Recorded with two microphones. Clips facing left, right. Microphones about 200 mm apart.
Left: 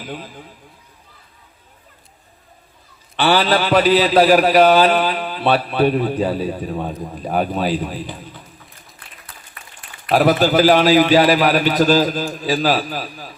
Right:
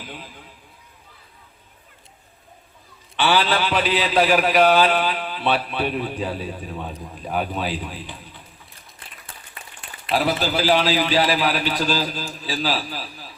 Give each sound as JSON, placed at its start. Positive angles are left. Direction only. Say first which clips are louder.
{"t": 3.2, "sound": "a man's voice", "louder": "left 4 dB", "side_deg": 40}
{"t": 10.4, "sound": "a man's voice", "louder": "left 7 dB", "side_deg": 45}